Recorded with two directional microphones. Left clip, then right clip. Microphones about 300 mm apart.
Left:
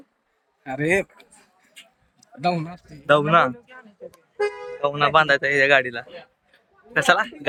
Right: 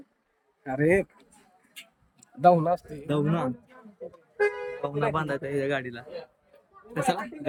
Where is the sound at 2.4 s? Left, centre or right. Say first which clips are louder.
Right 5 dB; right.